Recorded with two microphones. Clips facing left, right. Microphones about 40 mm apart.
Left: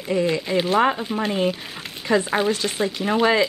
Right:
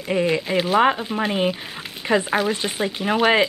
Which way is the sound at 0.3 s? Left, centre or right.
Centre.